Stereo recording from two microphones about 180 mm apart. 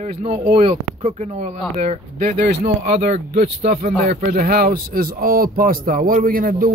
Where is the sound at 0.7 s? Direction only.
40° right (ahead or behind); by 3.0 s 60° right (ahead or behind).